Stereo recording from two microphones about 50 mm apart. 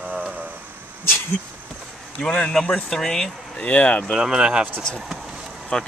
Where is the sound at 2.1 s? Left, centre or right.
Centre.